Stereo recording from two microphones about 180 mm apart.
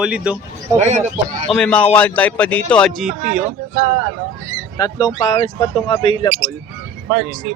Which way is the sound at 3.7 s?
45° right (ahead or behind).